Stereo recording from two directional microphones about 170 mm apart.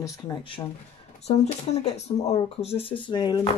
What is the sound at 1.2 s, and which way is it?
Speech, 40° left (ahead or behind).